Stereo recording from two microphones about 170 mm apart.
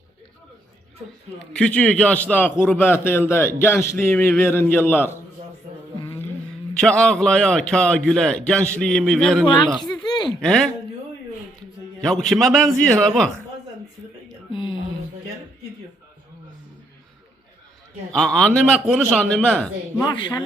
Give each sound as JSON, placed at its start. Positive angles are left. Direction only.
{"t": 1.5, "sound": "a man's voice", "side_deg": 5}
{"t": 6.7, "sound": "a man's voice", "side_deg": 5}
{"t": 10.2, "sound": "a sound", "side_deg": 5}
{"t": 12.0, "sound": "a man's voice", "side_deg": 0}
{"t": 14.5, "sound": "a sound", "side_deg": 30}
{"t": 18.1, "sound": "a man's voice", "side_deg": 5}
{"t": 20.0, "sound": "a woman's voice", "side_deg": 25}